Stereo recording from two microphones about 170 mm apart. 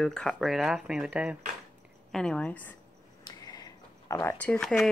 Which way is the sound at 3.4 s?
20° left (ahead or behind).